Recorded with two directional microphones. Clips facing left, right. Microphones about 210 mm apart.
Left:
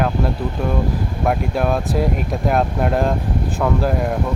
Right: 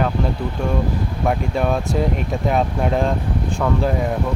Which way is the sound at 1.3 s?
5° left (ahead or behind).